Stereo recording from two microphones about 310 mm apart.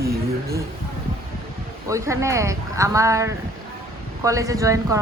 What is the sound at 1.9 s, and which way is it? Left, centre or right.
Speech, centre.